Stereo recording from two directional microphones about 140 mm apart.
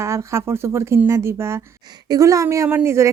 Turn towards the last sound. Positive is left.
turn(degrees=-20)  # may be behind; listen again after turning